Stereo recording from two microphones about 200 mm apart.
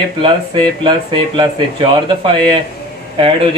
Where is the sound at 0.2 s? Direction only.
25° right (ahead or behind).